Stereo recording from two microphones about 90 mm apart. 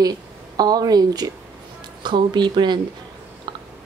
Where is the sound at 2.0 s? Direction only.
60° right (ahead or behind).